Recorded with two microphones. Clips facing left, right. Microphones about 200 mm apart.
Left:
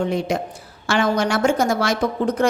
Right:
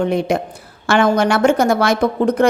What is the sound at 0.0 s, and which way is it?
A woman's voice, 60° right (ahead or behind).